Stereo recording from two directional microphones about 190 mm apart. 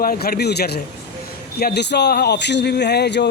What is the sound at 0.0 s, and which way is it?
Speech, 50° left (ahead or behind).